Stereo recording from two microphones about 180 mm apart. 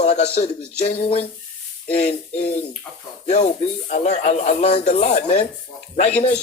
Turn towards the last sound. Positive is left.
turn(degrees=40)  # may be behind; listen again after turning